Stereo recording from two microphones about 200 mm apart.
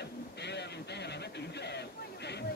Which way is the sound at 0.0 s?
55° left (ahead or behind).